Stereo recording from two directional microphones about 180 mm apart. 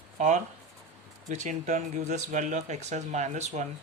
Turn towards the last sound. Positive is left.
turn(degrees=-40)  # may be behind; listen again after turning